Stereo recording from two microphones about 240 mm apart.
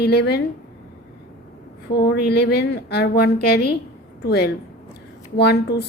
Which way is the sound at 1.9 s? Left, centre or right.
Left.